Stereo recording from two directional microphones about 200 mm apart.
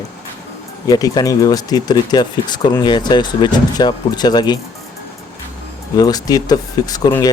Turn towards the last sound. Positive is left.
turn(degrees=20)  # may be behind; listen again after turning